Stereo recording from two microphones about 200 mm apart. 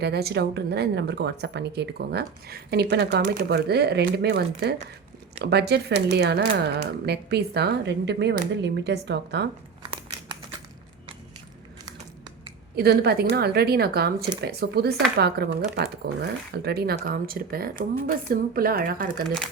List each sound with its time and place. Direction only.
0.0 s speech: 55° right (ahead or behind)
12.7 s speech: 50° right (ahead or behind)